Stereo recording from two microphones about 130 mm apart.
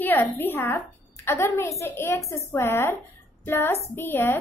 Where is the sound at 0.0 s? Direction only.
15° left (ahead or behind).